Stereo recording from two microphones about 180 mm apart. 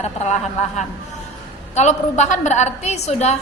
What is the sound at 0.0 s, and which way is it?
A woman's voice, 40° left (ahead or behind).